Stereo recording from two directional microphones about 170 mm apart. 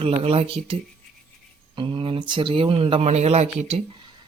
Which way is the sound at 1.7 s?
30° right (ahead or behind).